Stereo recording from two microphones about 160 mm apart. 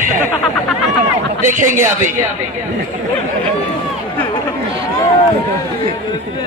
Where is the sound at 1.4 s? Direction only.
50° right (ahead or behind).